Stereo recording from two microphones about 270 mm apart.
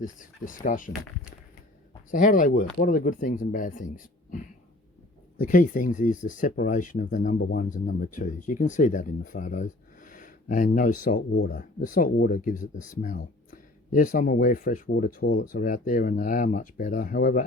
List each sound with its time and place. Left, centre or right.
0.0 s speech: left
5.4 s speech: left